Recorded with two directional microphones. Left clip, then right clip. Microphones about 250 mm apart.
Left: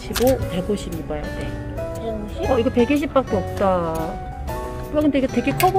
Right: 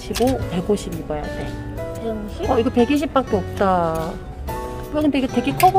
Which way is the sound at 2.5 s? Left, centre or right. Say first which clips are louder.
Right 1 dB; centre.